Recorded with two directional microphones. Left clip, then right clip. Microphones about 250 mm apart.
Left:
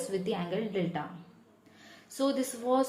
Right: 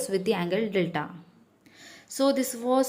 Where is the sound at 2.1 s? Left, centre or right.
Centre.